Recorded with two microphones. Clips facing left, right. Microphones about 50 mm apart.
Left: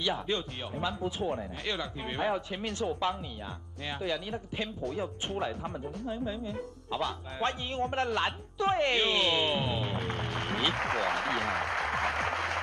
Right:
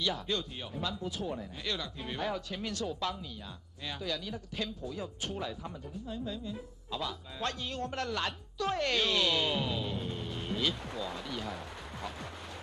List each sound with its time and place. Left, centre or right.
0.0 s speech: left
9.9 s music: left
10.7 s speech: left